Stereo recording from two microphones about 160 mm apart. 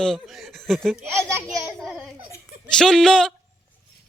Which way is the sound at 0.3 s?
Centre (ahead or behind).